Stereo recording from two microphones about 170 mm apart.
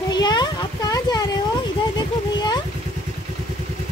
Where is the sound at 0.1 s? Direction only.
25° left (ahead or behind).